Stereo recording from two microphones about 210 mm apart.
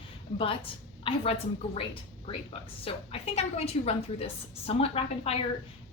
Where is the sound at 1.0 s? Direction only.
30° left (ahead or behind).